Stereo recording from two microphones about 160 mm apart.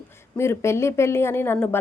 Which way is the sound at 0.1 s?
15° left (ahead or behind).